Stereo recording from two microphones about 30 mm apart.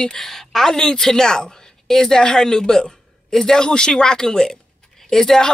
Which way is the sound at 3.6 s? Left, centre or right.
Left.